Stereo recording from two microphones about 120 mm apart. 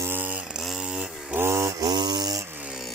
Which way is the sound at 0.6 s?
5° right (ahead or behind).